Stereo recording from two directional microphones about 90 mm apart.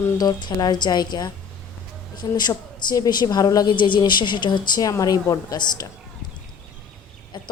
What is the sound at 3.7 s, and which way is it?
Speech, 60° left (ahead or behind).